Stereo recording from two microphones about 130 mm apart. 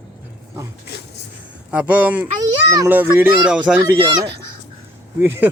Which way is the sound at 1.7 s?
10° right (ahead or behind).